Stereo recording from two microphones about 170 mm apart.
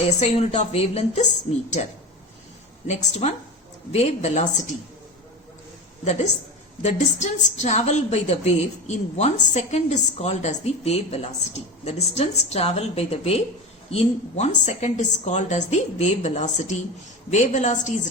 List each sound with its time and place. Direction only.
0.2 s a woman's voice: 40° left (ahead or behind)
2.8 s a woman's voice: 40° left (ahead or behind)
6.8 s a woman's voice: 40° left (ahead or behind)